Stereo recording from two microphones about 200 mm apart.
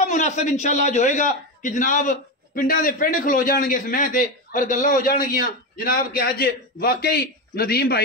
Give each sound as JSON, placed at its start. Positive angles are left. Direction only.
{"t": 0.0, "sound": "a man's voice", "side_deg": 35}